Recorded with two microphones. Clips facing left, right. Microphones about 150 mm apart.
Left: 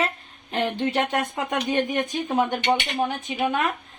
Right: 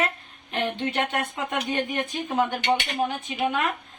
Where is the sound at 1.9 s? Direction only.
20° left (ahead or behind).